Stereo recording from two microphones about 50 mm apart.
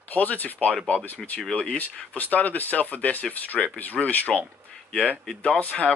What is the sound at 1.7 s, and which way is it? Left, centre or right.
Speech, left.